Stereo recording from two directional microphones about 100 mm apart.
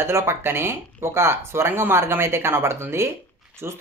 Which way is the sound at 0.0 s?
25° right (ahead or behind).